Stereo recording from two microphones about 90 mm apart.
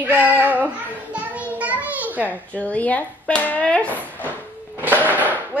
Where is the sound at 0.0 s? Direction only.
20° right (ahead or behind).